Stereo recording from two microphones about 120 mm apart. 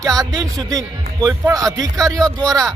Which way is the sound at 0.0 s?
30° right (ahead or behind).